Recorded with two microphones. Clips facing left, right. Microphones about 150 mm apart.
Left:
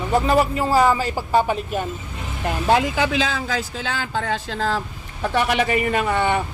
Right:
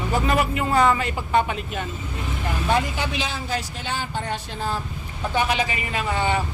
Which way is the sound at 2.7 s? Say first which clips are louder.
Left 5 dB; 90° left.